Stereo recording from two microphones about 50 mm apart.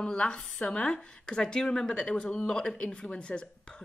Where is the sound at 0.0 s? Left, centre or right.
Centre.